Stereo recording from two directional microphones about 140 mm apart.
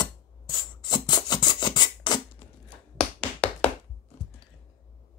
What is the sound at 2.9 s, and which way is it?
Tap, 45° left (ahead or behind).